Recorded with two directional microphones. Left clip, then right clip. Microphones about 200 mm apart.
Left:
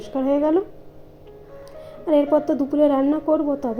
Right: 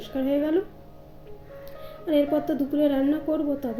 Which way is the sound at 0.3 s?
10° left (ahead or behind).